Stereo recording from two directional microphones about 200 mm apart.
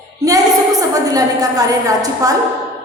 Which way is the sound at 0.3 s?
15° right (ahead or behind).